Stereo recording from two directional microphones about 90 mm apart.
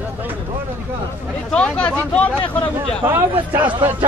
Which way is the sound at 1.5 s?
10° left (ahead or behind).